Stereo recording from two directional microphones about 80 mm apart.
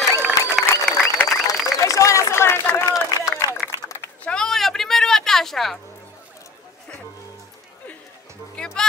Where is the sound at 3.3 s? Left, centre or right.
Left.